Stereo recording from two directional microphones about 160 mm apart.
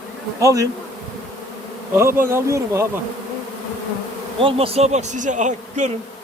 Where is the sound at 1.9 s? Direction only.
15° right (ahead or behind).